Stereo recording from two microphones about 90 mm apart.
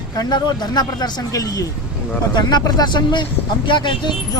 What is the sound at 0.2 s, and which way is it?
Speech, 50° left (ahead or behind).